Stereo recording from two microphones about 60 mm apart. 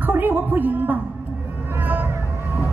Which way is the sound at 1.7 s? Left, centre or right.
Right.